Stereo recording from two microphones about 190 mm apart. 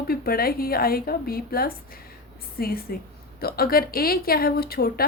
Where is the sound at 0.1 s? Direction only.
50° left (ahead or behind).